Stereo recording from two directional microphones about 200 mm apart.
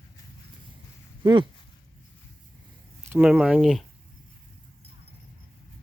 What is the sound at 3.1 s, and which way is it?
Speech, 5° right (ahead or behind).